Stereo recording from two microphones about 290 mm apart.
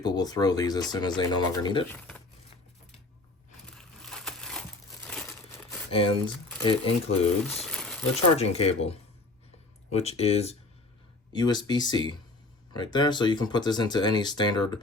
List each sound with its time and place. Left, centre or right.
0.0 s speech: centre
3.8 s a sound: centre
5.0 s crumpling: centre
5.9 s speech: centre
7.5 s crumpling: centre
8.4 s speech: left